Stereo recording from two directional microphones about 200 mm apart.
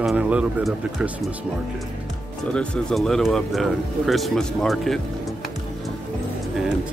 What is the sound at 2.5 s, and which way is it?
Speech, 5° left (ahead or behind).